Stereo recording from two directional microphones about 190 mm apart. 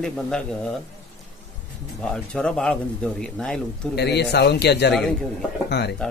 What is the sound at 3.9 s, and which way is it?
A man's voice, 60° left (ahead or behind).